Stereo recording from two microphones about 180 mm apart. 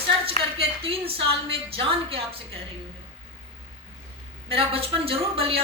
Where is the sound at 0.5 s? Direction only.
30° right (ahead or behind).